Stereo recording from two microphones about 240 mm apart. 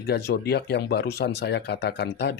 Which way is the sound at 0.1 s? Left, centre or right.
Left.